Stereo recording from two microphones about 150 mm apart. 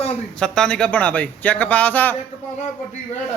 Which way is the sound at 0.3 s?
5° left (ahead or behind).